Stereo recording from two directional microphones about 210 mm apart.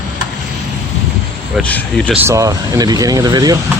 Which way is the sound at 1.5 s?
5° left (ahead or behind).